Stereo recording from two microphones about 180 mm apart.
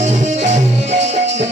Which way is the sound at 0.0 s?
40° right (ahead or behind).